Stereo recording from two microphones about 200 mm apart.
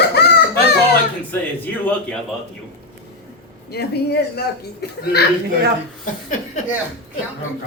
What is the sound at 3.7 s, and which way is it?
Speech, 55° left (ahead or behind).